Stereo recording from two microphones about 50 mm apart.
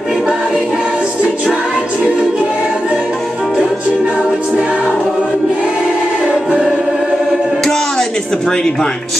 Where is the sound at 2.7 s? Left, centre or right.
Centre.